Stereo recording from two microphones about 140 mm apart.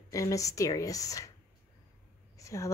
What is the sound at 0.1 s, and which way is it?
Speech, 25° left (ahead or behind).